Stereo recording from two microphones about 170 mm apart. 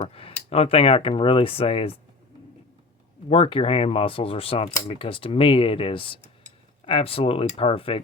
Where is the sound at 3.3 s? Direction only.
30° left (ahead or behind).